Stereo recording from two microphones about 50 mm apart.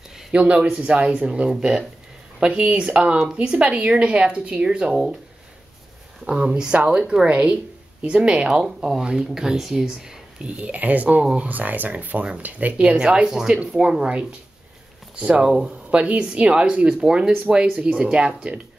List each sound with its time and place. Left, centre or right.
0.3 s speech: right
0.7 s speech: centre
6.2 s speech: centre; by 12.7 s right
12.7 s speech: right